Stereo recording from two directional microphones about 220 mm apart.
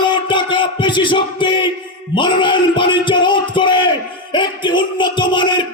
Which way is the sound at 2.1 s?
20° left (ahead or behind).